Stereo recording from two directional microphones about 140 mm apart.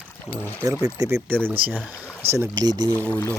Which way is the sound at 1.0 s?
20° right (ahead or behind).